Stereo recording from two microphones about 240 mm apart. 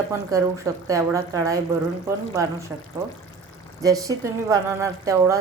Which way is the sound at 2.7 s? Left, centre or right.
Centre.